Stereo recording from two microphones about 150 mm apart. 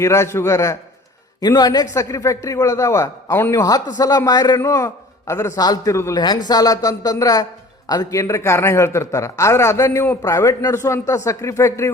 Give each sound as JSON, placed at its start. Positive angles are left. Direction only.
{"t": 0.0, "sound": "a man's voice", "side_deg": 20}